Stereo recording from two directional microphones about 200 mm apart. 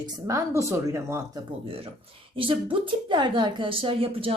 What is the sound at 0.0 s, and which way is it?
A woman's voice, 15° right (ahead or behind).